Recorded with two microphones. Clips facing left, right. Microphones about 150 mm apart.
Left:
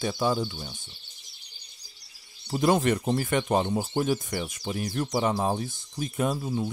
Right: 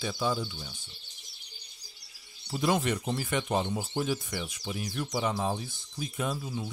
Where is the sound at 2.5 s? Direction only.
45° left (ahead or behind).